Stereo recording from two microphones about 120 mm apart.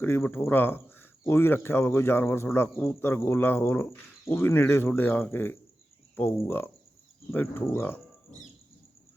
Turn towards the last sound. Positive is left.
turn(degrees=20)  # may be behind; listen again after turning